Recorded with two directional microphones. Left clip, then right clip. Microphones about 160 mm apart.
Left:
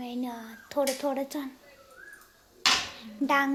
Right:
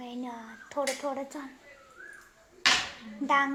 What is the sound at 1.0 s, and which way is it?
Speech, 45° left (ahead or behind).